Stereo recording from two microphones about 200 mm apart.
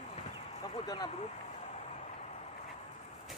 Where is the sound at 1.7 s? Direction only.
35° left (ahead or behind).